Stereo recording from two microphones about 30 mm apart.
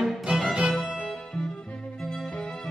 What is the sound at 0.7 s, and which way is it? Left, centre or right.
Music, centre.